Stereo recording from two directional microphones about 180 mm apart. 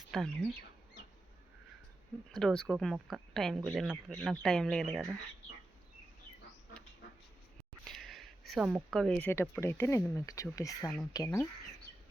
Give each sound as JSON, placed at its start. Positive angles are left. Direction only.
{"t": 0.1, "sound": "speech", "side_deg": 0}
{"t": 2.3, "sound": "speech", "side_deg": 5}
{"t": 7.9, "sound": "speech", "side_deg": 0}